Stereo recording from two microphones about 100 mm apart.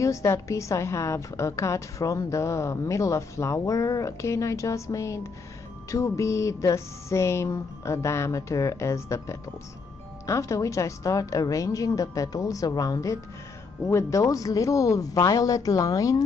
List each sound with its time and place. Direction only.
0.0 s a woman's voice: 30° left (ahead or behind)